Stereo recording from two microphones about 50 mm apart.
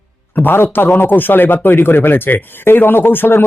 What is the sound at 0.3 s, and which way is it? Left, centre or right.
Speech, left.